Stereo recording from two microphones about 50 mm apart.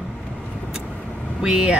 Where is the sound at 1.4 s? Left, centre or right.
Centre.